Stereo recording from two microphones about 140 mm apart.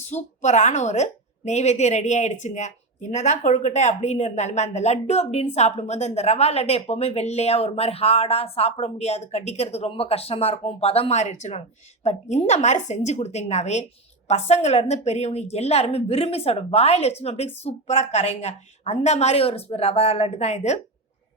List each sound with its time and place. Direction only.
0.0 s a woman's voice: 55° left (ahead or behind)